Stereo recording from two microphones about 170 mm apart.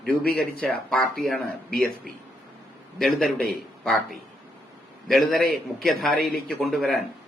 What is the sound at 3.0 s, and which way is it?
Speech, centre (ahead or behind).